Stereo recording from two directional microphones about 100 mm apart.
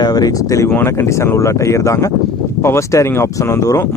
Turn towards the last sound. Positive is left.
turn(degrees=30)  # may be behind; listen again after turning